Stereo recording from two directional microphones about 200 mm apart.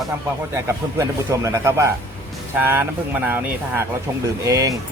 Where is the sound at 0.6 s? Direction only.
15° right (ahead or behind).